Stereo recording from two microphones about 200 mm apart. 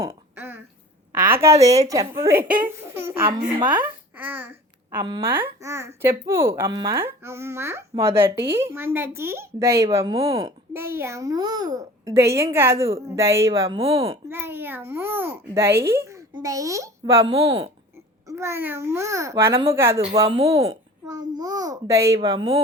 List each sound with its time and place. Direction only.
0.0 s burping: 15° right (ahead or behind)
1.1 s a sound: 10° right (ahead or behind)
1.9 s speech: 15° right (ahead or behind)
3.2 s a child's voice: 25° right (ahead or behind)
4.2 s babbling: 10° right (ahead or behind)
5.3 s speech: 10° right (ahead or behind)
13.7 s a child's voice: 30° right (ahead or behind)
14.3 s speech: 10° right (ahead or behind)
18.3 s speech: 15° right (ahead or behind)
20.1 s a child's voice: 25° right (ahead or behind)